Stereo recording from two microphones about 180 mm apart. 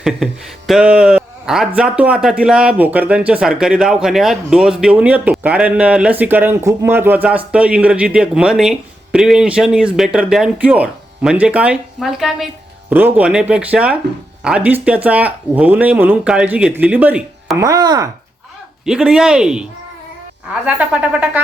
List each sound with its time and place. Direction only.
0.7 s a man's voice: 5° right (ahead or behind)
17.6 s speech: 20° right (ahead or behind)
18.9 s a man's voice: 5° right (ahead or behind)
20.7 s speech: 10° right (ahead or behind)